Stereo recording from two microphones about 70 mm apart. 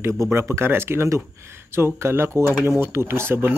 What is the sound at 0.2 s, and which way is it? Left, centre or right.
Speech, right.